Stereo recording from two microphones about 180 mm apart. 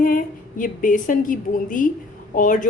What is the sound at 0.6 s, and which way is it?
A woman's voice, 50° left (ahead or behind).